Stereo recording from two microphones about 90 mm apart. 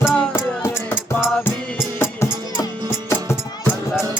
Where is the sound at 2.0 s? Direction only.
25° left (ahead or behind).